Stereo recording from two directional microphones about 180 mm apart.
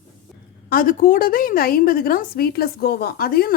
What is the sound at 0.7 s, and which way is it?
A woman's voice, 50° left (ahead or behind).